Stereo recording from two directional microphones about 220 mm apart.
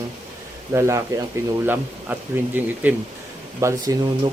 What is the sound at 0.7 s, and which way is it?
Speech, 15° right (ahead or behind).